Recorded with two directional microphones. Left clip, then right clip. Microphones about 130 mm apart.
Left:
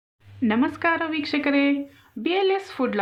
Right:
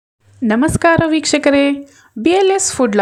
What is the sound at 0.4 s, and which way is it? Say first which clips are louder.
A woman's voice: right 9 dB; 75° right (ahead or behind).